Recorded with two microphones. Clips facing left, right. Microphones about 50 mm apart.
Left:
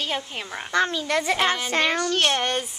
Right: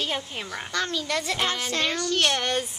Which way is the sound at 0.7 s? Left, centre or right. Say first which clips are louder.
Left 6 dB; left.